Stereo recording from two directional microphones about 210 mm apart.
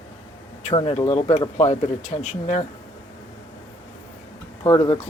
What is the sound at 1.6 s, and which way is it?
Speech, 30° left (ahead or behind).